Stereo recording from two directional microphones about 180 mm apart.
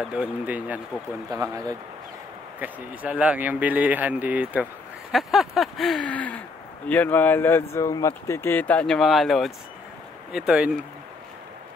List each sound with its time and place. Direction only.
0.0 s speech: 5° right (ahead or behind)
1.3 s speech: 20° right (ahead or behind)
2.6 s speech: 10° right (ahead or behind)